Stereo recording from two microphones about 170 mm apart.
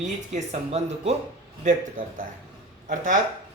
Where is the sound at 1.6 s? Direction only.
55° right (ahead or behind).